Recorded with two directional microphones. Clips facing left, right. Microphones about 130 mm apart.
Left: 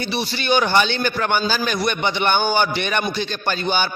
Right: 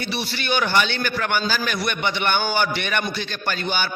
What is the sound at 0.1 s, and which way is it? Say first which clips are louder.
A man's voice: left 5 dB; 20° left (ahead or behind).